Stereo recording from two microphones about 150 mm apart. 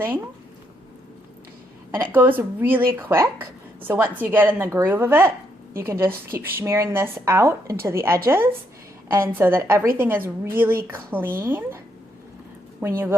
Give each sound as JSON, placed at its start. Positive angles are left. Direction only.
{"t": 1.9, "sound": "speech", "side_deg": -15}
{"t": 12.8, "sound": "speech", "side_deg": -15}